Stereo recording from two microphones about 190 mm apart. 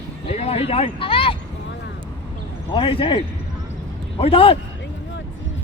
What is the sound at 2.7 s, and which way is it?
Speech, 25° left (ahead or behind).